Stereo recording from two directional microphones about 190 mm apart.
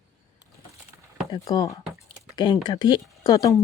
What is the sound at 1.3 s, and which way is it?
Speech, 20° left (ahead or behind).